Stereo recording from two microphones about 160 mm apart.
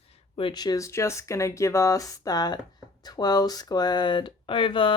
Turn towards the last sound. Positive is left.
turn(degrees=30)  # may be behind; listen again after turning